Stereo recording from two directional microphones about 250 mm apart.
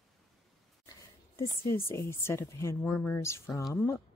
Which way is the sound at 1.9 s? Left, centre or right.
Centre.